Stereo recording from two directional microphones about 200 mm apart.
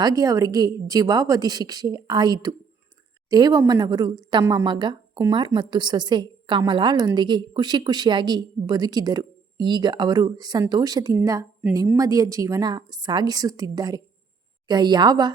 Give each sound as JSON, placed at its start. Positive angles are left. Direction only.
{"t": 0.0, "sound": "a woman's voice", "side_deg": -20}